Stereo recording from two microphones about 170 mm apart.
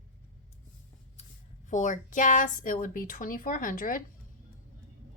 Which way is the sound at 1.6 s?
45° left (ahead or behind).